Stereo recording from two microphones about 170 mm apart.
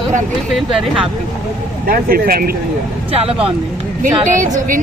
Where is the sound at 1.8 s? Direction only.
60° right (ahead or behind).